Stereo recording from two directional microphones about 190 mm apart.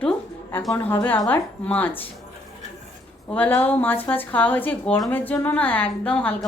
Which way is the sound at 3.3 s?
10° left (ahead or behind).